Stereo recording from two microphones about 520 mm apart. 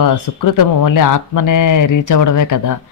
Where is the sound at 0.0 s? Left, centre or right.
Left.